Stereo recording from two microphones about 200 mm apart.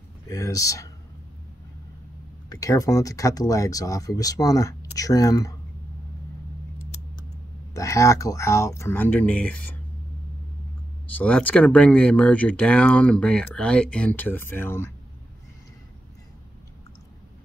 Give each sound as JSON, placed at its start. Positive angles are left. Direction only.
{"t": 0.3, "sound": "speech", "side_deg": 15}
{"t": 2.5, "sound": "speech", "side_deg": 15}
{"t": 7.7, "sound": "speech", "side_deg": 15}
{"t": 11.1, "sound": "speech", "side_deg": 5}